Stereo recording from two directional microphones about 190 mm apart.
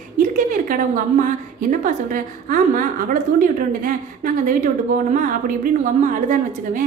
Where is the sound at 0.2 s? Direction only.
45° right (ahead or behind).